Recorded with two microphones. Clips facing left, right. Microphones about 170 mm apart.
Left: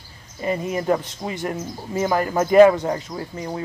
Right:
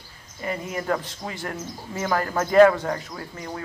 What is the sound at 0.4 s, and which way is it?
Speech, 20° left (ahead or behind).